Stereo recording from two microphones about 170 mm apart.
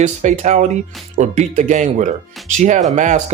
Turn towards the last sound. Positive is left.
turn(degrees=-45)  # may be behind; listen again after turning